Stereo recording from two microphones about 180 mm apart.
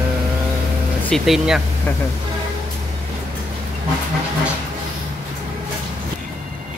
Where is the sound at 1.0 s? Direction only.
Centre (ahead or behind).